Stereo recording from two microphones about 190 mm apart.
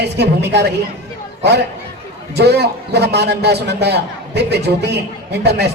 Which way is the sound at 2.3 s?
60° right (ahead or behind).